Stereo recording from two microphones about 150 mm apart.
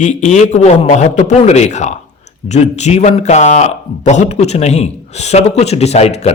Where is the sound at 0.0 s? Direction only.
50° left (ahead or behind).